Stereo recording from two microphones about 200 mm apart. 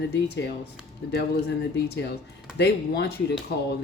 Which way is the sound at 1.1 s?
55° left (ahead or behind).